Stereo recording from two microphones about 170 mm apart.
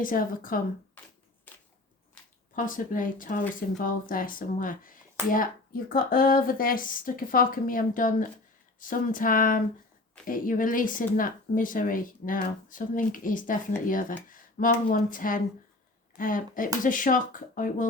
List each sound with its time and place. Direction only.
0.0 s speech: 55° left (ahead or behind)
1.5 s a sound: 10° left (ahead or behind)
2.6 s speech: 50° left (ahead or behind)